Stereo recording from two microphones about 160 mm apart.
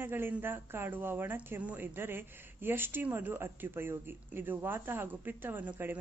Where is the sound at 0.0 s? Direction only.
15° right (ahead or behind).